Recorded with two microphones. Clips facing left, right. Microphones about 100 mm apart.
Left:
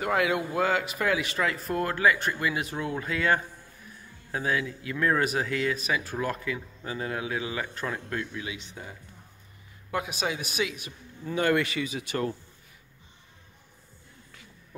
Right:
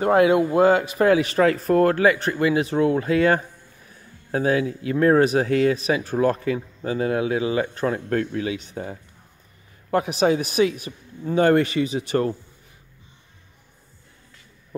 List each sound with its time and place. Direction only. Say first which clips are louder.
0.0 s speech: right 9 dB; 30° right (ahead or behind)
2.0 s speech: right 6 dB; 30° right (ahead or behind)
8.1 s speech: right 10 dB; 50° right (ahead or behind); by 12.4 s 35° right (ahead or behind)